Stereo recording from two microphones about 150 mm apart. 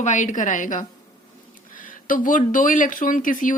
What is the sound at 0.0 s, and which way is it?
Speech, 55° left (ahead or behind).